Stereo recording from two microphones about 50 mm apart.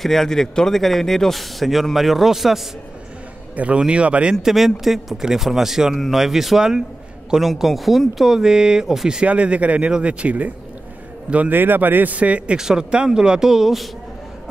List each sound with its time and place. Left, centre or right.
0.0 s speech: centre
3.5 s speech: right
4.4 s speech: centre
9.2 s speech: right
11.5 s a man's voice: right
12.5 s speech: centre